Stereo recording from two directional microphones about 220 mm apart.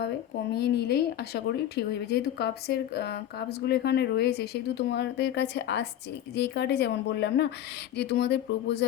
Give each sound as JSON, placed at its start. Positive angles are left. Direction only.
{"t": 0.5, "sound": "speech", "side_deg": 50}